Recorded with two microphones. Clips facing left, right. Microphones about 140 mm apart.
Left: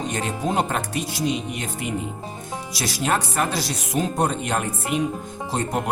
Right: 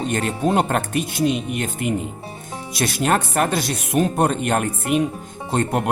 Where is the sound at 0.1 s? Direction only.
60° right (ahead or behind).